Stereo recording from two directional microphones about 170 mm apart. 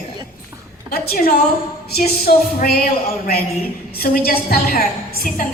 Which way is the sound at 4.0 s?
60° left (ahead or behind).